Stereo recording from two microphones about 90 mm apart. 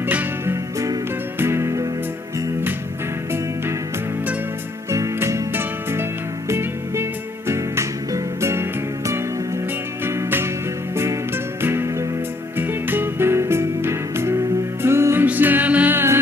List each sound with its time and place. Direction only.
1.4 s music: 30° right (ahead or behind)
4.9 s music: 35° right (ahead or behind)
11.6 s music: 30° right (ahead or behind)